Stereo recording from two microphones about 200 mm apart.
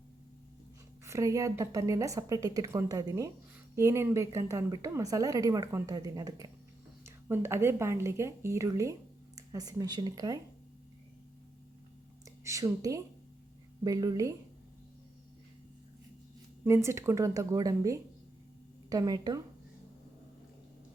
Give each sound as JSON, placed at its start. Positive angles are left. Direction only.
{"t": 1.0, "sound": "speech", "side_deg": -15}
{"t": 12.5, "sound": "speech", "side_deg": -15}
{"t": 16.6, "sound": "speech", "side_deg": -15}